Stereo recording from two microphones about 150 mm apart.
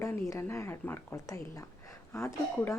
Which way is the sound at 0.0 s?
20° left (ahead or behind).